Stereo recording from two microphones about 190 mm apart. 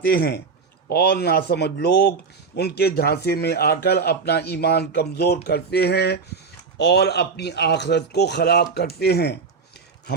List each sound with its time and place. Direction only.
0.0 s a man's voice: 55° left (ahead or behind)